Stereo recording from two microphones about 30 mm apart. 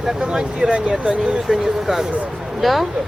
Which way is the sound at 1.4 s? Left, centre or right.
Centre.